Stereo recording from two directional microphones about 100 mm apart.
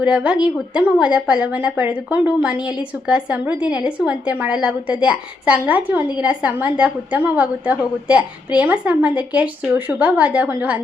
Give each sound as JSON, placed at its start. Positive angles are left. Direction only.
{"t": 0.0, "sound": "a woman's voice", "side_deg": -10}